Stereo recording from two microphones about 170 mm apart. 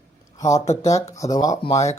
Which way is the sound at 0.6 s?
40° left (ahead or behind).